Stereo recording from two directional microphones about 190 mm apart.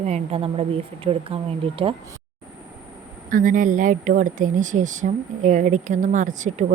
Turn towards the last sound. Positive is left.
turn(degrees=-40)  # may be behind; listen again after turning